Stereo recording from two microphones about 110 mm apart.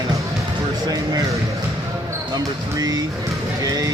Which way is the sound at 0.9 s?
35° right (ahead or behind).